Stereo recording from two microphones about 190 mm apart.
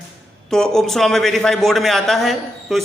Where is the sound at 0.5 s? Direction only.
Centre (ahead or behind).